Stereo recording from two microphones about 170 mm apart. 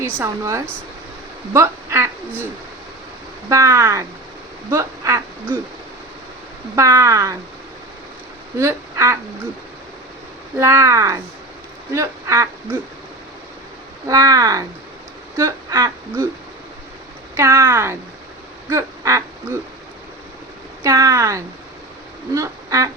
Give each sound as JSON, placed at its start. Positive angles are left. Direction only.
{"t": 0.0, "sound": "speech", "side_deg": -15}
{"t": 3.5, "sound": "speech", "side_deg": -15}
{"t": 6.7, "sound": "speech", "side_deg": -20}
{"t": 8.5, "sound": "speech", "side_deg": -15}
{"t": 10.6, "sound": "speech", "side_deg": -15}
{"t": 14.1, "sound": "speech", "side_deg": -20}
{"t": 17.3, "sound": "speech", "side_deg": -15}
{"t": 18.7, "sound": "quack", "side_deg": -15}
{"t": 20.8, "sound": "speech", "side_deg": -20}
{"t": 22.4, "sound": "quack", "side_deg": -20}